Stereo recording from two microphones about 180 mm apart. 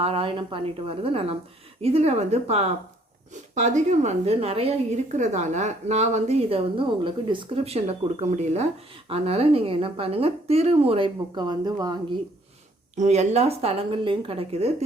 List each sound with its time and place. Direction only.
0.0 s a woman's voice: 30° right (ahead or behind)
13.0 s a woman's voice: 40° right (ahead or behind)